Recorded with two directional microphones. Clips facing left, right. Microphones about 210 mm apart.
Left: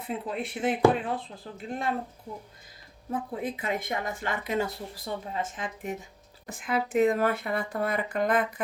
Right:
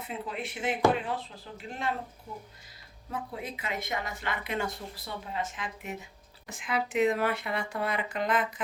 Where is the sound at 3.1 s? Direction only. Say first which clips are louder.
Left 5 dB; 50° left (ahead or behind).